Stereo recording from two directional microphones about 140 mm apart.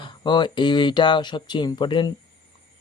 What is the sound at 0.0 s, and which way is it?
Speech, 35° left (ahead or behind).